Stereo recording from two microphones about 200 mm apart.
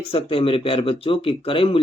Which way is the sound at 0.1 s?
25° left (ahead or behind).